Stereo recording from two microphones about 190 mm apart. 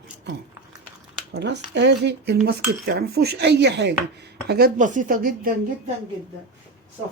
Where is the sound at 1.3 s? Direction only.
65° right (ahead or behind).